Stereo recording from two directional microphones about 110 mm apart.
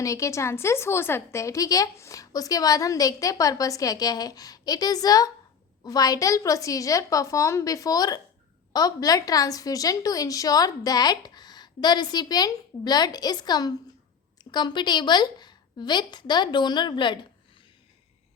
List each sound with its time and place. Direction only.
0.0 s a woman's voice: 30° left (ahead or behind); by 17.2 s 45° left (ahead or behind)